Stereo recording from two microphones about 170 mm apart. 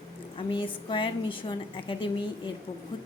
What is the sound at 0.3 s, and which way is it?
A woman's voice, 30° left (ahead or behind).